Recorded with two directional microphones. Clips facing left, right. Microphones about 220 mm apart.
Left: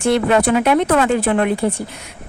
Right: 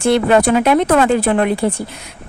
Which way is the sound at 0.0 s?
35° right (ahead or behind).